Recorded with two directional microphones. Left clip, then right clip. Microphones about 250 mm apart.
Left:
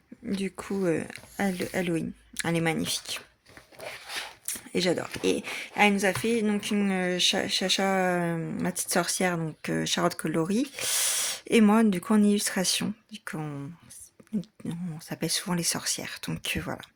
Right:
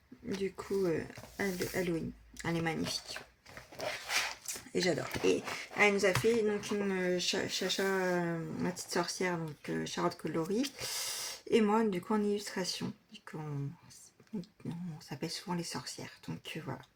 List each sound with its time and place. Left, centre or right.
0.4 s speech: left
4.4 s a sound: left
5.2 s speech: left
15.1 s speech: left